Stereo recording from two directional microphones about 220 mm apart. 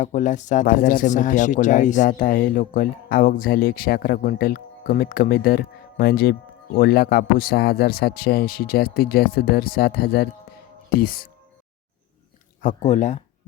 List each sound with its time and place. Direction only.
0.0 s a man's voice: 35° left (ahead or behind)
12.6 s speech: 35° left (ahead or behind)